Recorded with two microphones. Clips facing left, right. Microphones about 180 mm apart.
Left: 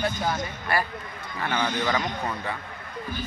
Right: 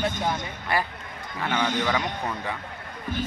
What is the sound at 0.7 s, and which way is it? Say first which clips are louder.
Speech: even; 20° right (ahead or behind).